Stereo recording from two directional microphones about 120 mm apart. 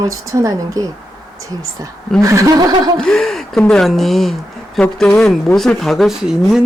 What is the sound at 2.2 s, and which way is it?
Speech, 25° right (ahead or behind).